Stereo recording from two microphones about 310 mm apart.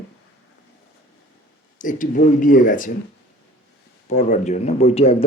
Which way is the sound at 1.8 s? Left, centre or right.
Left.